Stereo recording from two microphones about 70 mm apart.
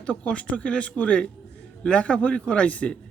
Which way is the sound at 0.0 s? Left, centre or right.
Centre.